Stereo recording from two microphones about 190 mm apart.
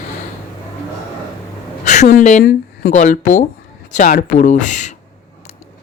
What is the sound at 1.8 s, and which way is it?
Speech, 40° left (ahead or behind).